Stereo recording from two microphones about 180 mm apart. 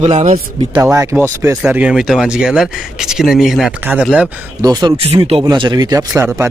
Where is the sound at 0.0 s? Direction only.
40° right (ahead or behind).